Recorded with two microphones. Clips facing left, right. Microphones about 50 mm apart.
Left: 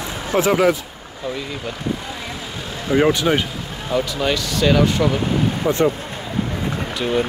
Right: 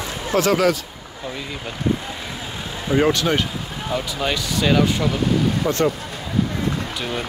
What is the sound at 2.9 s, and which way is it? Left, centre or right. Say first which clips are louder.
Speech: left 2 dB; centre.